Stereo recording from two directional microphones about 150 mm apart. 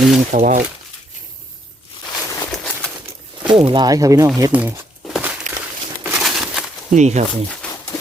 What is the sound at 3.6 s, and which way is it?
Speech, 30° right (ahead or behind).